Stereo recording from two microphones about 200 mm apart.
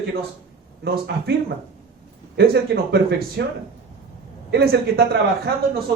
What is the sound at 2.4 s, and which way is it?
Speech, 50° right (ahead or behind).